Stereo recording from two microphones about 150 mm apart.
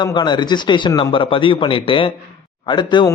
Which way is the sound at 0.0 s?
30° left (ahead or behind).